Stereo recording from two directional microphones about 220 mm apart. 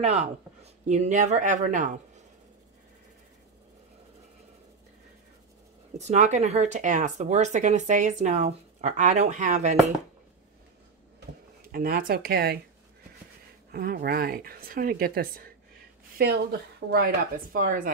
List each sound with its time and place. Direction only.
0.0 s speech: 30° right (ahead or behind)
5.9 s speech: 30° right (ahead or behind)
11.1 s a sound: 40° right (ahead or behind)
13.7 s a woman's voice: 40° right (ahead or behind)
16.9 s speech: 40° right (ahead or behind)